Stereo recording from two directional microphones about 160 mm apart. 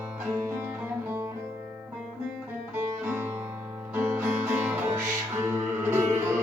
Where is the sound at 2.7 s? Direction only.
15° right (ahead or behind).